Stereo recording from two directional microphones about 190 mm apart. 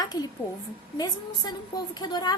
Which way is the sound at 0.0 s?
20° left (ahead or behind).